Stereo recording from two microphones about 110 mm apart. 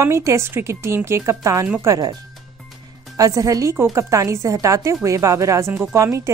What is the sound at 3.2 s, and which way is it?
Speech, 30° right (ahead or behind).